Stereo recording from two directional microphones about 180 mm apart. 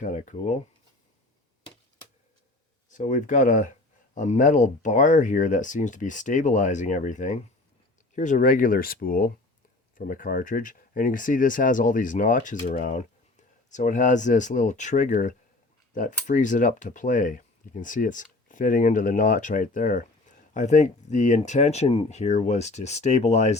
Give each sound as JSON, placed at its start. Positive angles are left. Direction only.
{"t": 0.0, "sound": "speech", "side_deg": 45}
{"t": 2.9, "sound": "speech", "side_deg": 45}